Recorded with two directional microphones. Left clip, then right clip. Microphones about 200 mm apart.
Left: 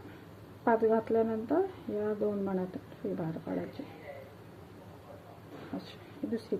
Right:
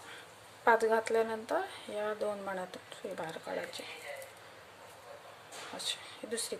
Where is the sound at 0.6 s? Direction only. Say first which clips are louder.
Even; 20° right (ahead or behind).